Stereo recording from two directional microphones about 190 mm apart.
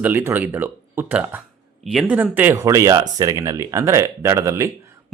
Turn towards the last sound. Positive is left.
turn(degrees=-15)  # may be behind; listen again after turning